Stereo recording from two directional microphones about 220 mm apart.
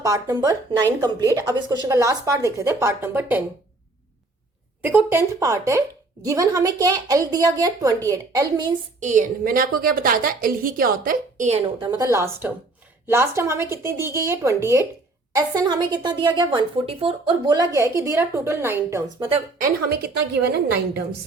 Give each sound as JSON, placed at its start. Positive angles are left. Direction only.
{"t": 0.0, "sound": "a woman's voice", "side_deg": -15}
{"t": 4.8, "sound": "a woman's voice", "side_deg": -10}
{"t": 9.0, "sound": "a woman's voice", "side_deg": -35}
{"t": 11.8, "sound": "a woman's voice", "side_deg": -20}
{"t": 19.5, "sound": "a woman's voice", "side_deg": -40}